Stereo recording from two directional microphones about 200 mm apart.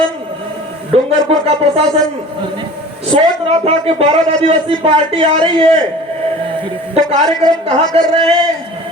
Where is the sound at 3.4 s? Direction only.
30° right (ahead or behind).